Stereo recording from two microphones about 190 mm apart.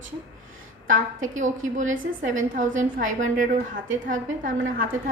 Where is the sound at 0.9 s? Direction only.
45° right (ahead or behind).